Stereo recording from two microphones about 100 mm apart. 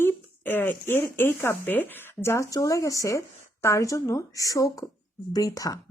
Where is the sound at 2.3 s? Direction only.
35° left (ahead or behind).